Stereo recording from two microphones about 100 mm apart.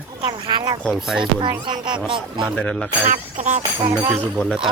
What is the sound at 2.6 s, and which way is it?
Speech, 10° left (ahead or behind).